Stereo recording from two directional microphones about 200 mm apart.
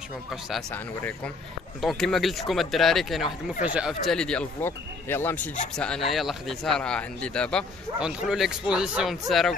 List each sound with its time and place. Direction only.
0.3 s a man's voice: centre (ahead or behind)